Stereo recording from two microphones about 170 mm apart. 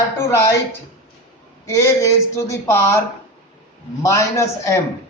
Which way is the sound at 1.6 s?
20° left (ahead or behind).